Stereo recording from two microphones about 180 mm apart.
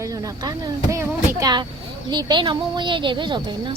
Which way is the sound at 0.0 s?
20° right (ahead or behind).